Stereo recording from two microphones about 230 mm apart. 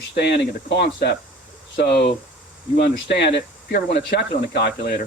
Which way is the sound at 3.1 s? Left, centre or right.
Left.